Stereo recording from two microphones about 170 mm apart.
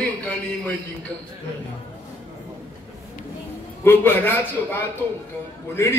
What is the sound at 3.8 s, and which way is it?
Speech, 10° left (ahead or behind).